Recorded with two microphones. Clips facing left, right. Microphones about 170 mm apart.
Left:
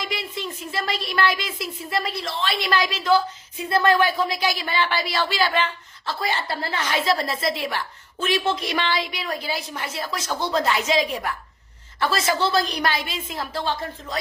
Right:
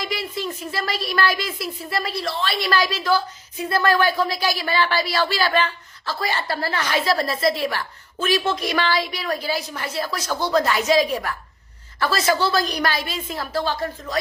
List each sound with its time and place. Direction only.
0.1 s a woman's voice: 20° left (ahead or behind)